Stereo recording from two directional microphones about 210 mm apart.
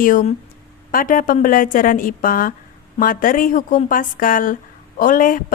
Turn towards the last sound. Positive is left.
turn(degrees=40)  # may be behind; listen again after turning